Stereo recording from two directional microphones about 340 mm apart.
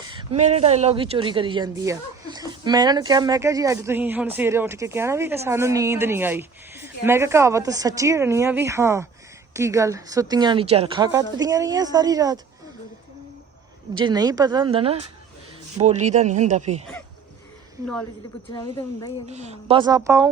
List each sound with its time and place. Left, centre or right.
0.0 s speech: centre
13.9 s speech: centre
19.3 s speech: centre